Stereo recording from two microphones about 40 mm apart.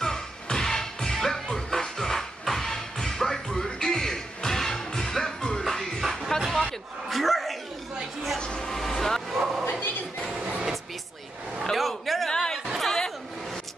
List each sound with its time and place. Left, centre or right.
0.0 s music: centre
6.4 s a sound: centre
8.4 s vehicle: centre
9.4 s bow-wow: centre
9.7 s bow-wow: left
11.7 s a sound: centre
12.3 s chatter: centre